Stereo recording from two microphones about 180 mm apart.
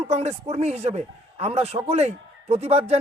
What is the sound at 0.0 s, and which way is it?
Speech, 35° right (ahead or behind).